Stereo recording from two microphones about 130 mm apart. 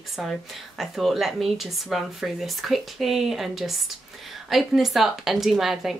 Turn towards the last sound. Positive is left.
turn(degrees=0)  # may be behind; listen again after turning